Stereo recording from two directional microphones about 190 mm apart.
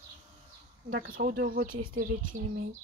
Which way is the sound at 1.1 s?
50° right (ahead or behind).